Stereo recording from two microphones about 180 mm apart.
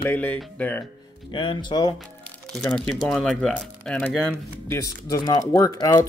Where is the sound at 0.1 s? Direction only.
10° left (ahead or behind).